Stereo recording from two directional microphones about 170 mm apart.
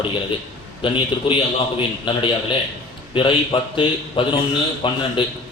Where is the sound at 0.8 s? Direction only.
30° left (ahead or behind).